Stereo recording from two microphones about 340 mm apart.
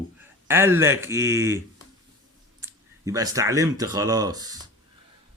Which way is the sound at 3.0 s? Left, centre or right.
Centre.